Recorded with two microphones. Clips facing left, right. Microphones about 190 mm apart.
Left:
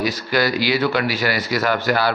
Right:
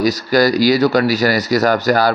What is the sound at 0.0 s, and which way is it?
Speech, 40° right (ahead or behind).